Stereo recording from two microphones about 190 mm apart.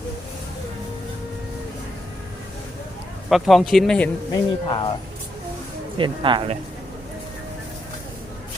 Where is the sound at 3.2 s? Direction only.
Centre (ahead or behind).